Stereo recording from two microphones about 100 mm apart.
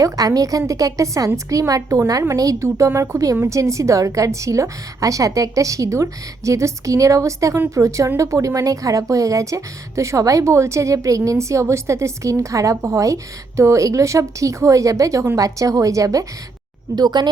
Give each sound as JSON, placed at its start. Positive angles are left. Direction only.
{"t": 0.0, "sound": "a woman's voice", "side_deg": -35}
{"t": 16.9, "sound": "speech", "side_deg": -45}